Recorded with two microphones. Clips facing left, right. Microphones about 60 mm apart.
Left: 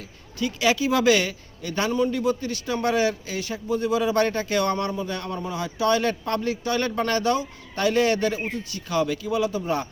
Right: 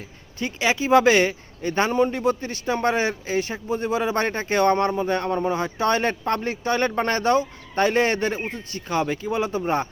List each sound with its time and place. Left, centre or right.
0.3 s speech: right